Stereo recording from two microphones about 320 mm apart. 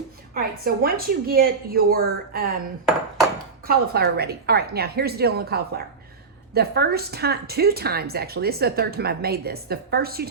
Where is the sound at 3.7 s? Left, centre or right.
Right.